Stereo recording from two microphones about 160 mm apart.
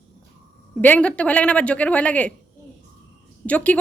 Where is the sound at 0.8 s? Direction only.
10° left (ahead or behind).